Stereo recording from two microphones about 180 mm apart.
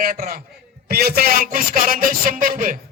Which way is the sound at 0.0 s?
55° right (ahead or behind).